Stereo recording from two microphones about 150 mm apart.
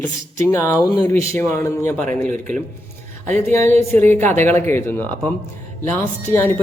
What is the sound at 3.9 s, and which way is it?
A man's voice, 15° left (ahead or behind).